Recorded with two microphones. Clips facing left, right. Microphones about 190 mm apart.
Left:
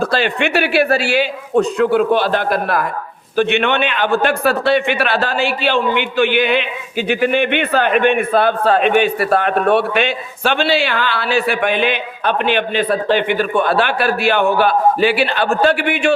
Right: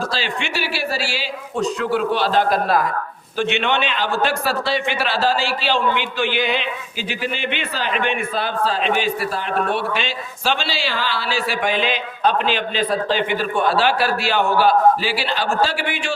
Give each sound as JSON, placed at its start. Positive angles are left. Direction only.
{"t": 0.0, "sound": "a man's voice", "side_deg": 60}